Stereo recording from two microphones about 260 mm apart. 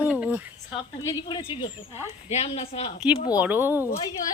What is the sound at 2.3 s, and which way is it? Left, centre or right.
Speech, left.